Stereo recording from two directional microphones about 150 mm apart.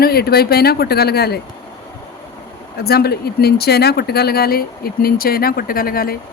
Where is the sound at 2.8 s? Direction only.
90° left.